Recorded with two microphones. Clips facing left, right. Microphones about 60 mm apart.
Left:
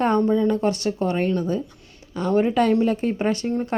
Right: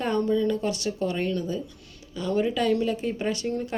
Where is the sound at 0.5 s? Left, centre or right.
Left.